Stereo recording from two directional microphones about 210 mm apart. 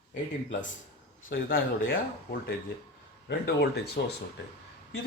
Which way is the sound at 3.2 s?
50° left (ahead or behind).